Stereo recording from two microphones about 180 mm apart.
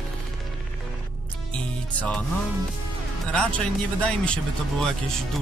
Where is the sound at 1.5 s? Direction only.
5° left (ahead or behind).